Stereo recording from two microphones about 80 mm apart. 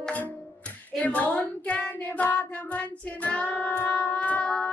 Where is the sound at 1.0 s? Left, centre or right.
Centre.